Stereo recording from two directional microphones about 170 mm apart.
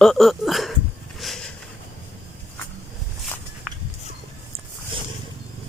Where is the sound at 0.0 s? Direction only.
Centre (ahead or behind).